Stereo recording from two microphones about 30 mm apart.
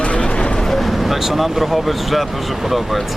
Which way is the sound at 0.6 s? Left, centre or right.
Centre.